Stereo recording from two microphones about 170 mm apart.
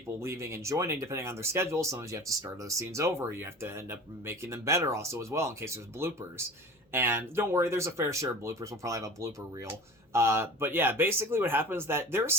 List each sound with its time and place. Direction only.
0.2 s speech: 15° right (ahead or behind)